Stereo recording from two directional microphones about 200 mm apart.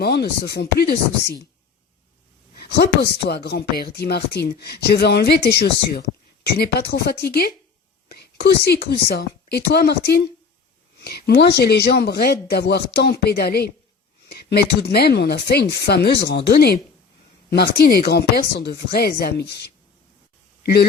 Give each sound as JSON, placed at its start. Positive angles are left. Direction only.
{"t": 0.0, "sound": "speech", "side_deg": 55}
{"t": 2.6, "sound": "speech", "side_deg": 50}